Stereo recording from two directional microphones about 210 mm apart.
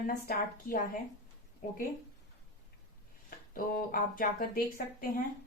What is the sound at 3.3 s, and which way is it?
Speech, 40° left (ahead or behind).